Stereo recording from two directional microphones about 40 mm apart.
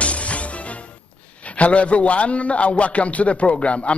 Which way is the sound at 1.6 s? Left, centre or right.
Left.